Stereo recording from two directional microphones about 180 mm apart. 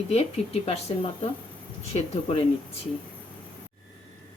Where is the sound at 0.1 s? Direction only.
35° left (ahead or behind).